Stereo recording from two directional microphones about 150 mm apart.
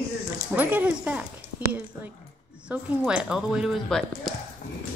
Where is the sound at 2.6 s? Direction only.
5° right (ahead or behind).